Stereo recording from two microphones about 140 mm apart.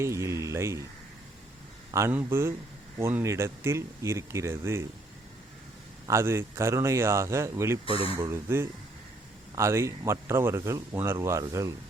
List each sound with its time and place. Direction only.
0.0 s speech: 20° right (ahead or behind)
1.9 s speech: 20° right (ahead or behind)
6.1 s speech: 20° right (ahead or behind)